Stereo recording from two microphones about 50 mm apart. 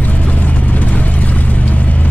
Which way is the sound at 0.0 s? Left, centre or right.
Left.